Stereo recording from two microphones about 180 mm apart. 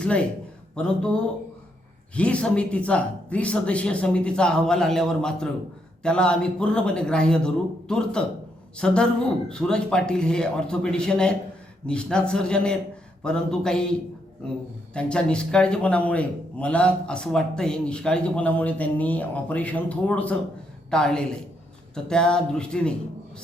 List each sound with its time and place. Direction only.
0.0 s a man's voice: 5° left (ahead or behind)
14.9 s a man's voice: 5° left (ahead or behind)